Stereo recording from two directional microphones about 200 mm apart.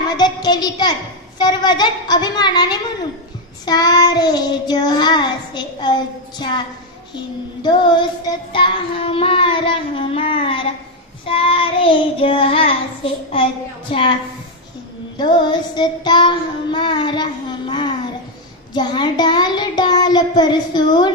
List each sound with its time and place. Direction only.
0.2 s child singing: 20° left (ahead or behind)
7.6 s child singing: 25° left (ahead or behind)
15.1 s child singing: 25° left (ahead or behind)